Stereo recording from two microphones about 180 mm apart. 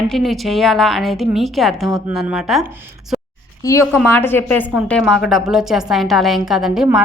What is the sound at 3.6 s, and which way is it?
A woman's voice, 15° left (ahead or behind).